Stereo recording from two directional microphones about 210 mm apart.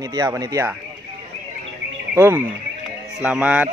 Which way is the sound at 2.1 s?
10° right (ahead or behind).